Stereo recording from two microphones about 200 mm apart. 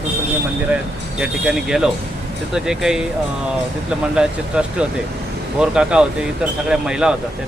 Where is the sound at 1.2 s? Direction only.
5° right (ahead or behind).